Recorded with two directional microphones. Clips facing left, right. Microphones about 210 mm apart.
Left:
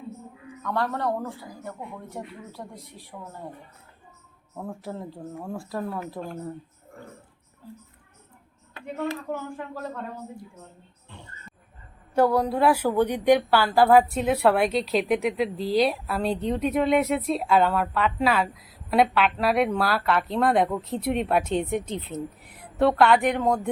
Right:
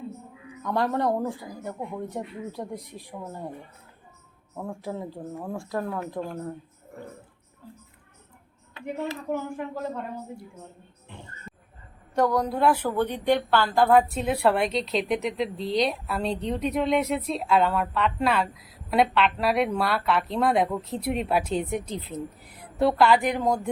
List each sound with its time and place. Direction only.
0.6 s speech: 15° right (ahead or behind)
4.5 s speech: centre (ahead or behind)
9.3 s speech: 20° right (ahead or behind)
11.5 s a sound: centre (ahead or behind)
12.1 s a woman's voice: 5° left (ahead or behind)